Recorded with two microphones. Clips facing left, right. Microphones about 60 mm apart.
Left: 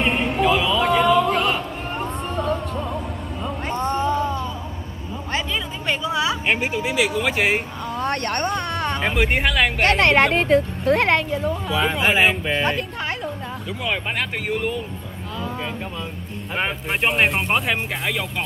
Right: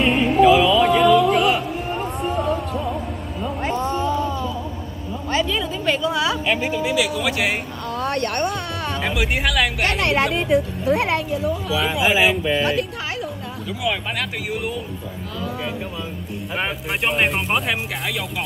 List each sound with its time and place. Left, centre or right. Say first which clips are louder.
0.0 s a sound: right 3 dB; left
0.4 s music: right 7 dB; centre
3.6 s music: even; centre
5.3 s a sound: right 4 dB; centre
6.4 s a woman's voice: right 1 dB; left; by 8.2 s centre
8.3 s speech: even; centre
9.2 s speech: left 1 dB; centre
9.9 s speech: left 4 dB; left
11.4 s speech: even; centre
16.5 s speech: left 1 dB; centre